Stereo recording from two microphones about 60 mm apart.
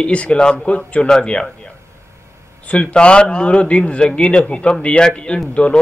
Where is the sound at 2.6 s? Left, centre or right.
Left.